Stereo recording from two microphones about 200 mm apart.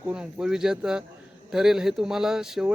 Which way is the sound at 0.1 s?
5° right (ahead or behind).